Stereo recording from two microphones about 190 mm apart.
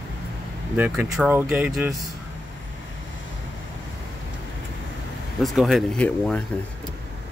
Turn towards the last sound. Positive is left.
turn(degrees=5)  # may be behind; listen again after turning